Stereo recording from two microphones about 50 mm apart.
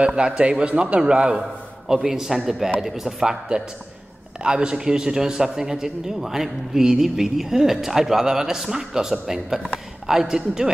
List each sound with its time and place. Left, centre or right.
0.0 s a man's voice: centre
4.4 s a man's voice: centre